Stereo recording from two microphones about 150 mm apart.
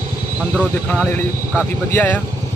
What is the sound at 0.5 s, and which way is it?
Speech, 10° left (ahead or behind).